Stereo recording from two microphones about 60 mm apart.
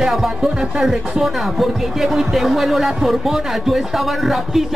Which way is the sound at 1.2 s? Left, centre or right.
Centre.